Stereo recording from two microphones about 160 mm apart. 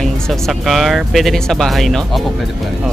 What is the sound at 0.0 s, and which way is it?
Speech, centre (ahead or behind).